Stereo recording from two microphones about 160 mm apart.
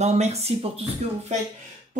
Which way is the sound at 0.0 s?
45° right (ahead or behind).